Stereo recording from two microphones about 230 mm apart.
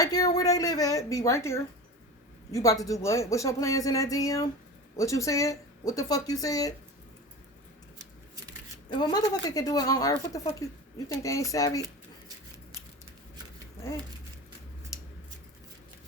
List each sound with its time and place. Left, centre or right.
0.0 s speech: centre
8.9 s speech: centre